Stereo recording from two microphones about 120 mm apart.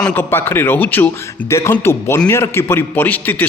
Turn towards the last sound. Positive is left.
turn(degrees=15)  # may be behind; listen again after turning